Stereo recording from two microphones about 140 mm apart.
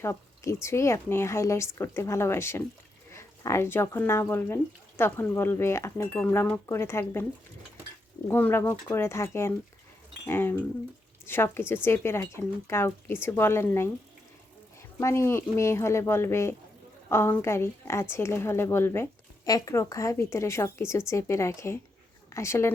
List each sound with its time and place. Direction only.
0.0 s a woman's voice: 20° left (ahead or behind)
8.3 s speech: 15° left (ahead or behind)
14.9 s a woman's voice: 20° left (ahead or behind)